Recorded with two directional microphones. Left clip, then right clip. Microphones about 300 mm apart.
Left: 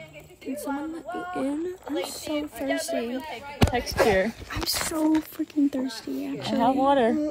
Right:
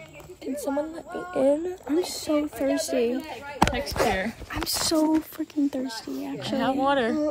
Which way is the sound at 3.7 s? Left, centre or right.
Centre.